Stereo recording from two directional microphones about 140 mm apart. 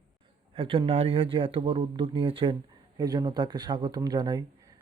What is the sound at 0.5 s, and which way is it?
Speech, 40° right (ahead or behind).